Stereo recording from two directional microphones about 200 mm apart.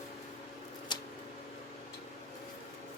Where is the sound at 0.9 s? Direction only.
25° left (ahead or behind).